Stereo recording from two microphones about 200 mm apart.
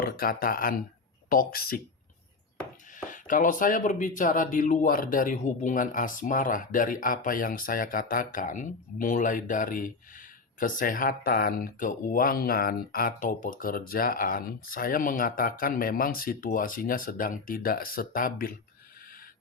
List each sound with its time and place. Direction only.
0.0 s speech: 45° left (ahead or behind)
2.9 s speech: 40° left (ahead or behind)